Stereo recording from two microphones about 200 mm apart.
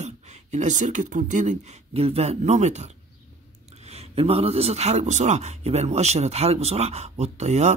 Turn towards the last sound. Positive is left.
turn(degrees=-35)  # may be behind; listen again after turning